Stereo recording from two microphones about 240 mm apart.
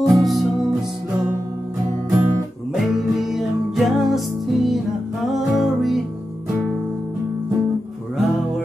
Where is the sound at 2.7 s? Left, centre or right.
Centre.